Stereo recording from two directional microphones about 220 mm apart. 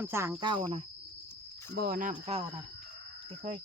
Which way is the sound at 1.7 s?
40° right (ahead or behind).